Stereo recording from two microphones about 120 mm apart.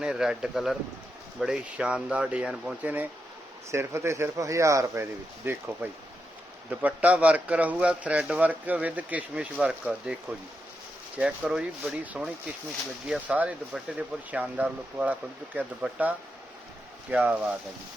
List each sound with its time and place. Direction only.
0.0 s a man's voice: 5° right (ahead or behind)